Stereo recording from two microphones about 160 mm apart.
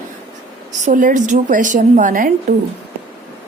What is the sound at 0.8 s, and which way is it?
A woman's voice, 55° right (ahead or behind).